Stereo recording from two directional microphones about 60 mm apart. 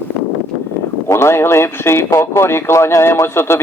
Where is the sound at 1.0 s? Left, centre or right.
Left.